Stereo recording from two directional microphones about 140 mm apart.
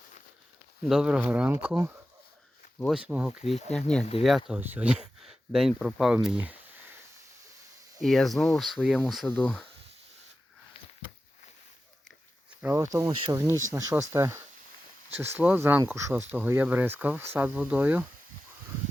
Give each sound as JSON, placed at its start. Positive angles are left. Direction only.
{"t": 0.9, "sound": "speech", "side_deg": -5}
{"t": 3.4, "sound": "speech", "side_deg": 50}
{"t": 3.8, "sound": "speech", "side_deg": 5}
{"t": 6.2, "sound": "a sound", "side_deg": -10}
{"t": 8.0, "sound": "speech", "side_deg": 0}
{"t": 9.2, "sound": "speech", "side_deg": 10}
{"t": 12.6, "sound": "speech", "side_deg": -20}